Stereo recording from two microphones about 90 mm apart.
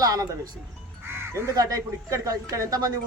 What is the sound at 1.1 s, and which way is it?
Speech, 35° right (ahead or behind).